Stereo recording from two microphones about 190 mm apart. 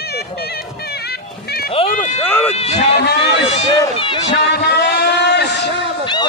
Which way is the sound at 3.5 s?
25° left (ahead or behind).